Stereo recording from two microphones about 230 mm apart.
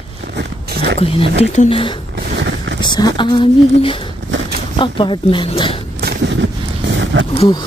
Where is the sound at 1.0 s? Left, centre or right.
Left.